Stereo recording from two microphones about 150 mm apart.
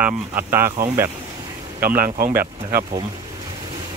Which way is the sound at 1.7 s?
75° right (ahead or behind).